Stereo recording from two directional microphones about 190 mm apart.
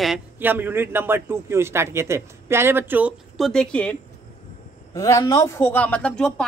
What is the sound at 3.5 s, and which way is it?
Speech, 5° left (ahead or behind).